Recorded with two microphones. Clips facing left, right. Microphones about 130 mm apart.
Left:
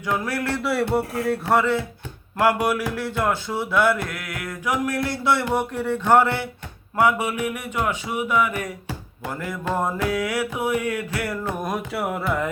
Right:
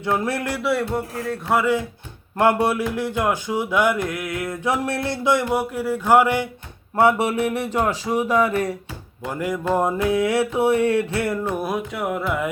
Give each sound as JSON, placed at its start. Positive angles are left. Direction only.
{"t": 0.0, "sound": "music", "side_deg": -25}
{"t": 0.6, "sound": "speech", "side_deg": 0}
{"t": 2.4, "sound": "mantra", "side_deg": -25}
{"t": 6.9, "sound": "speech", "side_deg": -30}
{"t": 9.3, "sound": "music", "side_deg": -15}
{"t": 11.9, "sound": "speech", "side_deg": 0}